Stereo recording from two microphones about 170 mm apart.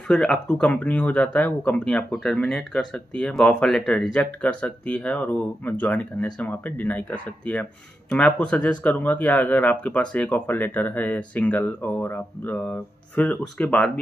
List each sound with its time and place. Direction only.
0.1 s speech: 5° left (ahead or behind)